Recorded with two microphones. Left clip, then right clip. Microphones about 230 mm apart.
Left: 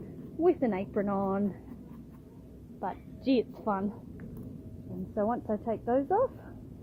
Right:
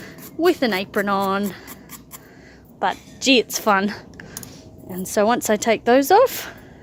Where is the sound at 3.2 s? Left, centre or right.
Right.